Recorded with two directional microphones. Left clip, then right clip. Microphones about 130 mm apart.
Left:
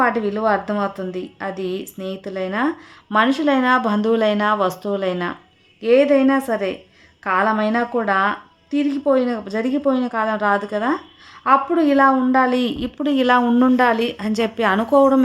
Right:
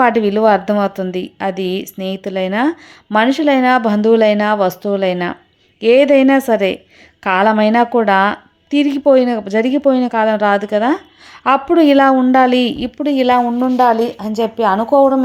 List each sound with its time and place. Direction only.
0.0 s a woman's voice: 40° right (ahead or behind)
5.8 s a woman's voice: 40° right (ahead or behind); by 15.0 s 15° right (ahead or behind)